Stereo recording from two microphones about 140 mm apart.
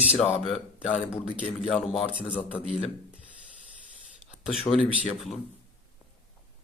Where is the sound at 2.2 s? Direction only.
10° left (ahead or behind).